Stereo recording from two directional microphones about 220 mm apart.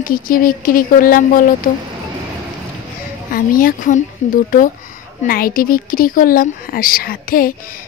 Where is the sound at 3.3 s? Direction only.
40° left (ahead or behind).